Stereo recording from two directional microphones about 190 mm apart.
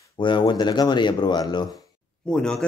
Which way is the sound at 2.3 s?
5° left (ahead or behind).